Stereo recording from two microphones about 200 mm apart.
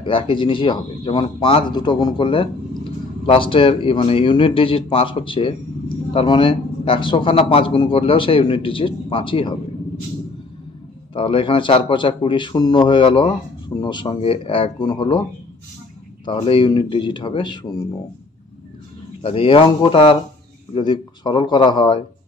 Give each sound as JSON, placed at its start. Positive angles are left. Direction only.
{"t": 0.0, "sound": "a man's voice", "side_deg": 25}
{"t": 11.1, "sound": "a man's voice", "side_deg": 25}
{"t": 16.3, "sound": "a man's voice", "side_deg": 25}
{"t": 19.2, "sound": "a man's voice", "side_deg": 25}